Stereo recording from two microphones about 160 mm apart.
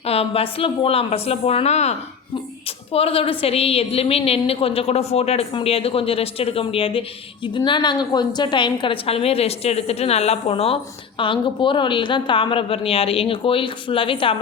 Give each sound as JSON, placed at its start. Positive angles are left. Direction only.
{"t": 0.0, "sound": "a woman's voice", "side_deg": 40}